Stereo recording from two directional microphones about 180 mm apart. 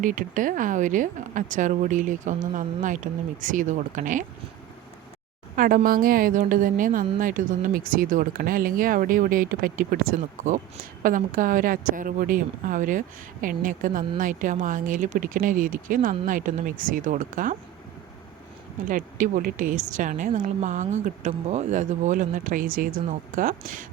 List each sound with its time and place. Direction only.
0.0 s speech: 50° right (ahead or behind)
5.5 s speech: 50° right (ahead or behind)
18.9 s speech: 45° right (ahead or behind)